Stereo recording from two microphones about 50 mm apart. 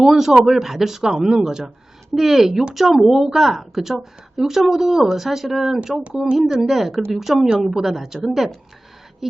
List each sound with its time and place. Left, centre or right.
0.0 s a woman's voice: centre
6.7 s a woman's voice: centre